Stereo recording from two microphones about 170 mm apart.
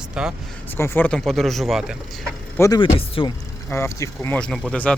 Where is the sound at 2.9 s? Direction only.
30° left (ahead or behind).